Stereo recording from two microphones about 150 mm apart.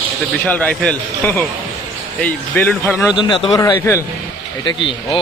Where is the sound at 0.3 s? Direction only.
10° left (ahead or behind).